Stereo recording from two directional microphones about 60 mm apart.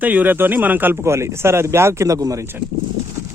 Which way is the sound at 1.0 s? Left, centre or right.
Right.